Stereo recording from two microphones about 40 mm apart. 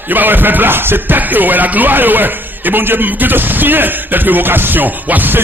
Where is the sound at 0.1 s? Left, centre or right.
Right.